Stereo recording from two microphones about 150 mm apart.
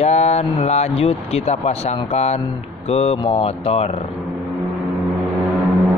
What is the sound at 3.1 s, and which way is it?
Speech, 35° left (ahead or behind).